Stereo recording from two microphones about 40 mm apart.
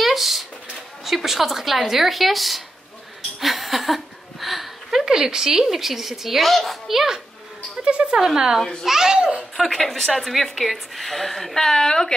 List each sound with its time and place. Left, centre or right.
0.0 s a sound: centre
1.0 s a woman's voice: centre
3.3 s a sound: centre
5.0 s a woman's voice: centre
7.8 s speech: right
8.8 s a woman's voice: centre
9.8 s a woman's voice: centre